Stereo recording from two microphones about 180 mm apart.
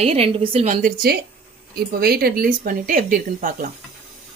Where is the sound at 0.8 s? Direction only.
55° right (ahead or behind).